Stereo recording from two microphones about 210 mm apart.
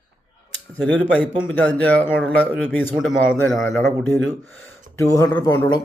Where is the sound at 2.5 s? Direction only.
Centre (ahead or behind).